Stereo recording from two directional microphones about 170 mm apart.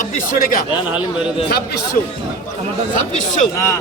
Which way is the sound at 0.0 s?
50° left (ahead or behind).